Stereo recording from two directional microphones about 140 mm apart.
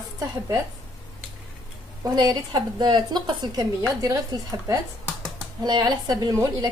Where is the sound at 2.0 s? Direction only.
30° right (ahead or behind).